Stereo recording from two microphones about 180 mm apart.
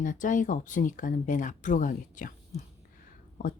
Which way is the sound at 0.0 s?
45° left (ahead or behind).